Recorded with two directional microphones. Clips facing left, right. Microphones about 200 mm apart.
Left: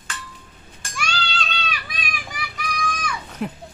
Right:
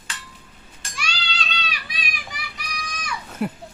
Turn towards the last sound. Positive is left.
turn(degrees=-5)  # may be behind; listen again after turning